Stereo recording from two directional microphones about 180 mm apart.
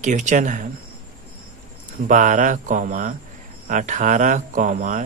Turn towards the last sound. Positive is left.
turn(degrees=-45)  # may be behind; listen again after turning